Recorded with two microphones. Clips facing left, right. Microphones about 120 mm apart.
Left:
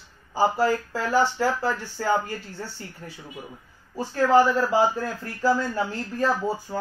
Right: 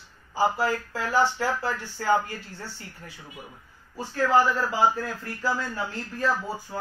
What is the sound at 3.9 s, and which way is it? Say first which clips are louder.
Speech: left 3 dB; 35° left (ahead or behind).